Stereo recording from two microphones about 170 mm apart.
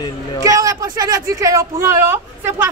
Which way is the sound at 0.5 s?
20° right (ahead or behind).